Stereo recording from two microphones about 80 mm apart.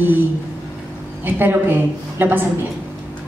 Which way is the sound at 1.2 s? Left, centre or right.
Right.